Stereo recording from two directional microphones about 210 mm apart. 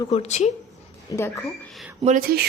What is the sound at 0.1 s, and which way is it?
Speech, 30° left (ahead or behind).